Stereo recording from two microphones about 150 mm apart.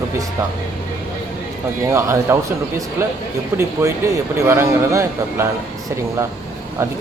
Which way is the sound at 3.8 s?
20° right (ahead or behind).